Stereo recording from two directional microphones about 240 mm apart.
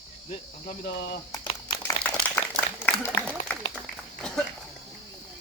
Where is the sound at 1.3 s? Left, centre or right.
Centre.